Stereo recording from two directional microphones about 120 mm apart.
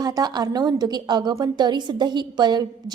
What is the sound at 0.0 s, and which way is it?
A woman's voice, 30° right (ahead or behind).